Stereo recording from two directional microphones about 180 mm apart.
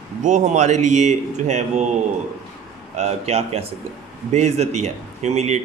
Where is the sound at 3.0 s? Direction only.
35° right (ahead or behind).